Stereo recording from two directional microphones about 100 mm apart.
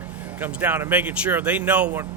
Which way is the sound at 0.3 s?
20° right (ahead or behind).